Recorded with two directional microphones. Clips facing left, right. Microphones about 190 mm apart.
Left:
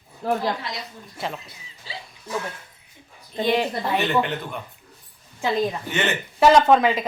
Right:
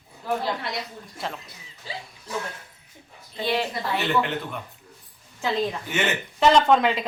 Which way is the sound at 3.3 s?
15° left (ahead or behind).